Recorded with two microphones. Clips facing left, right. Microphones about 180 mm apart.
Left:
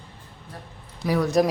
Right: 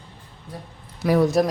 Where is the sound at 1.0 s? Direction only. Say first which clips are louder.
Right 4 dB; 70° right (ahead or behind).